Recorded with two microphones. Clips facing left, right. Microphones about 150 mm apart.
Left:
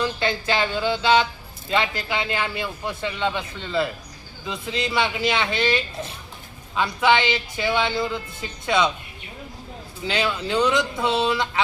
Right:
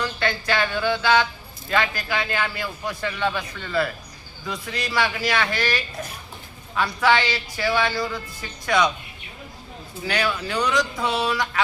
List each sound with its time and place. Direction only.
0.0 s speech: 25° left (ahead or behind)
10.0 s speech: 25° left (ahead or behind)